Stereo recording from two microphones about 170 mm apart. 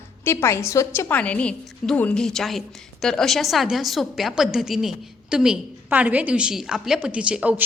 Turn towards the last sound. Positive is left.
turn(degrees=-5)  # may be behind; listen again after turning